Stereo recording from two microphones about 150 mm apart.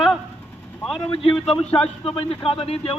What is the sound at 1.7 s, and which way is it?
A man's voice, 40° left (ahead or behind).